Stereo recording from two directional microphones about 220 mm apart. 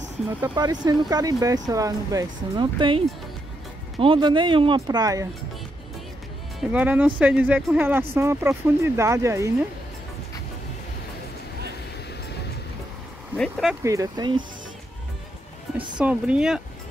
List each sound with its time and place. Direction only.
0.4 s speech: 20° right (ahead or behind)
4.0 s speech: 25° right (ahead or behind)
6.6 s speech: 5° right (ahead or behind)
13.4 s speech: centre (ahead or behind)
13.8 s speech: 15° right (ahead or behind)
16.0 s speech: 5° right (ahead or behind)